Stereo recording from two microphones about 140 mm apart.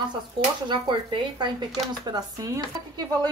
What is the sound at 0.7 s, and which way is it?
A woman's voice, 35° right (ahead or behind).